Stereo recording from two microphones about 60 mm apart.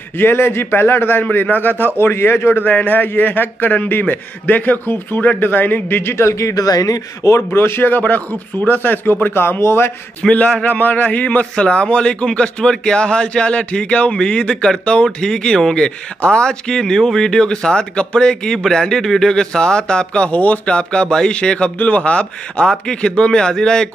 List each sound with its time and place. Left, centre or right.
0.2 s a man's voice: left
2.0 s a man's voice: left
2.6 s a man's voice: left
7.3 s speech: left
8.0 s speech: left
10.2 s a man's voice: centre
10.6 s a man's voice: left; by 23.9 s centre